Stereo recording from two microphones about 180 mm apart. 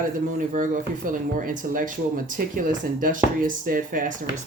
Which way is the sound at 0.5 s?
50° right (ahead or behind).